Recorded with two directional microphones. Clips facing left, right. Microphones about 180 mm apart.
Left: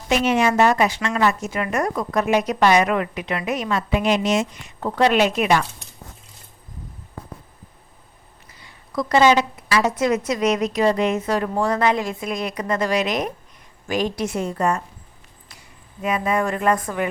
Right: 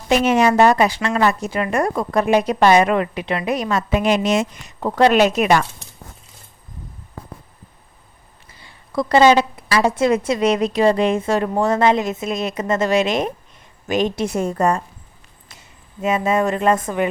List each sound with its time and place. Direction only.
0.1 s a woman's voice: 40° right (ahead or behind)
4.6 s speech: 40° right (ahead or behind)
8.5 s a woman's voice: 30° right (ahead or behind)
14.3 s a woman's voice: 45° right (ahead or behind)
15.4 s speech: 25° right (ahead or behind)